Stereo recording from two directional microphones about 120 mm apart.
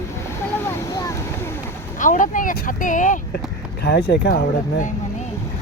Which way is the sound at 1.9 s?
90° left.